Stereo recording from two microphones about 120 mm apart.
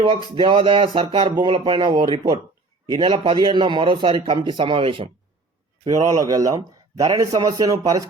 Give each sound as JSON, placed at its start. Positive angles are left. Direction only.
{"t": 0.3, "sound": "a man's voice", "side_deg": -45}
{"t": 6.1, "sound": "a man's voice", "side_deg": -30}